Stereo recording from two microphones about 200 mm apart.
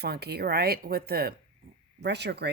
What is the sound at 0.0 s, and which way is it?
Speech, 55° right (ahead or behind).